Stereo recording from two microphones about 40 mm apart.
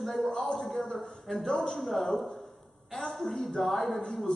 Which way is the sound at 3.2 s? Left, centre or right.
Centre.